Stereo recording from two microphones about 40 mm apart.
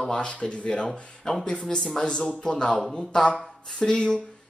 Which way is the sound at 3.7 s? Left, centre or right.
Centre.